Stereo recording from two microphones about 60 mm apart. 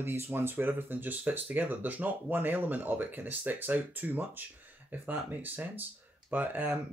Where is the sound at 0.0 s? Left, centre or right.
Right.